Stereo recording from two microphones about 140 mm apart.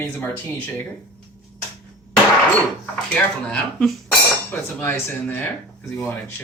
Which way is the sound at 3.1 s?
5° left (ahead or behind).